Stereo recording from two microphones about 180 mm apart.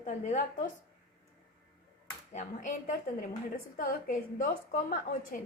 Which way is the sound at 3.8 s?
50° left (ahead or behind).